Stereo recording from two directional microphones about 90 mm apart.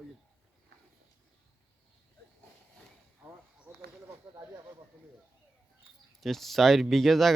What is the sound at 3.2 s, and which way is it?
Speech, 15° right (ahead or behind).